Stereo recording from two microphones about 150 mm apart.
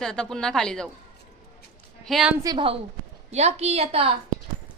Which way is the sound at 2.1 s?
5° right (ahead or behind).